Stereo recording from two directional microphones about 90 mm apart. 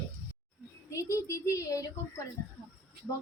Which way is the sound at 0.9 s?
35° left (ahead or behind).